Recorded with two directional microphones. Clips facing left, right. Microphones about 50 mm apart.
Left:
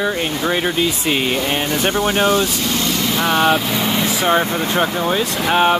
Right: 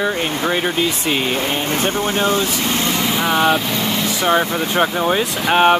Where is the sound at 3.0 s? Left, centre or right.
Centre.